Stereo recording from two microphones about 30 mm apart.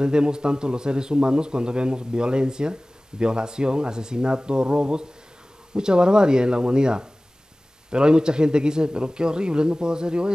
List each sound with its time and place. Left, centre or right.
0.0 s a man's voice: right